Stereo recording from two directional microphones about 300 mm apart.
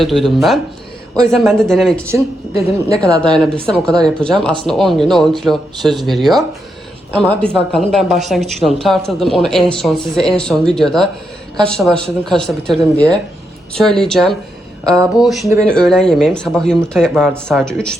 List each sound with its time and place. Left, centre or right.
0.0 s speech: centre
3.4 s speech: centre